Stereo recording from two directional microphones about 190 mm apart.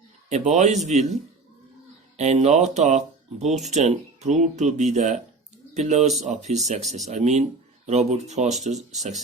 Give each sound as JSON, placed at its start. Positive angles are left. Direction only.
{"t": 0.3, "sound": "speech", "side_deg": -35}